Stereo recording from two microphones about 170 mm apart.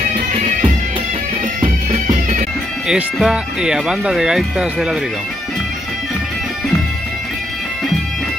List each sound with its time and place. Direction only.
1.6 s music: 30° right (ahead or behind)
2.9 s speech: 5° right (ahead or behind)